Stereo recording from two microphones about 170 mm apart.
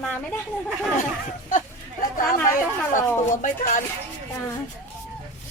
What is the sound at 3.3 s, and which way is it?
Speech, 50° left (ahead or behind).